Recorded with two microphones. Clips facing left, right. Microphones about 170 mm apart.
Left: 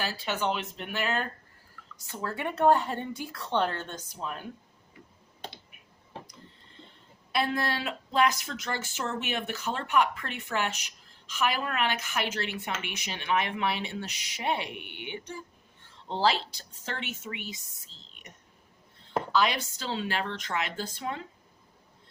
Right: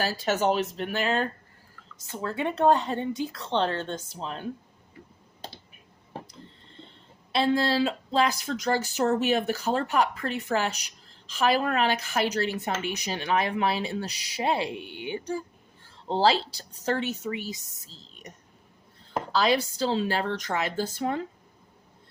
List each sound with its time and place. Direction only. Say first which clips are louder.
0.0 s speech: right 6 dB; 40° right (ahead or behind)
2.1 s speech: right 3 dB; 20° right (ahead or behind)
7.3 s speech: right 6 dB; 25° right (ahead or behind); by 21.2 s 40° right (ahead or behind)